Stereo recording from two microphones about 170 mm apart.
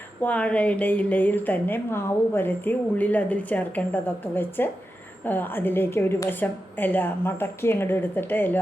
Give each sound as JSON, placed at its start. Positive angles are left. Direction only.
{"t": 0.2, "sound": "a woman's voice", "side_deg": 10}